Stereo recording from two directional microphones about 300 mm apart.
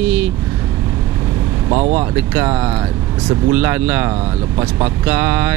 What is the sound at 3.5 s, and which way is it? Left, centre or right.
Speech, centre.